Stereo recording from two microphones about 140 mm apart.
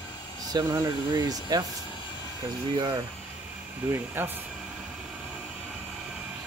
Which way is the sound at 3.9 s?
15° right (ahead or behind).